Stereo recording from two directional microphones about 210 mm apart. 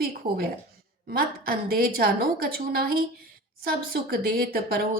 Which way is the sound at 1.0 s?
45° right (ahead or behind).